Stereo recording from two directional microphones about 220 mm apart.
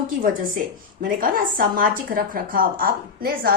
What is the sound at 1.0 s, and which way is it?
A woman's voice, 40° right (ahead or behind).